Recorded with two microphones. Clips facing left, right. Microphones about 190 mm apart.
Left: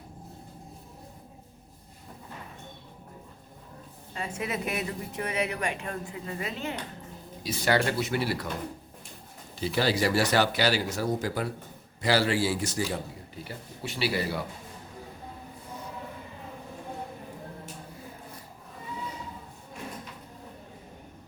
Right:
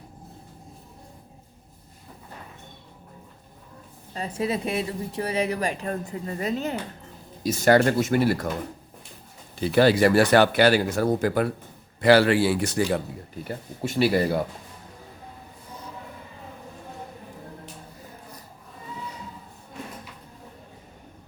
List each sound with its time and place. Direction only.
4.1 s a woman's voice: 35° right (ahead or behind)
9.6 s a man's voice: 55° right (ahead or behind)